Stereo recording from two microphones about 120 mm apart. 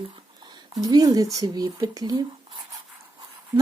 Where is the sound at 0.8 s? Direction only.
30° right (ahead or behind).